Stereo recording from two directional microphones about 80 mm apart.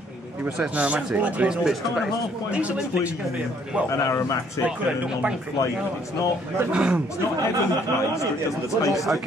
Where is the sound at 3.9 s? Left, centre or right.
Left.